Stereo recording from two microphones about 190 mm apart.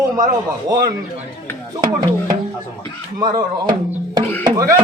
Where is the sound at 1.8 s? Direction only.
20° right (ahead or behind).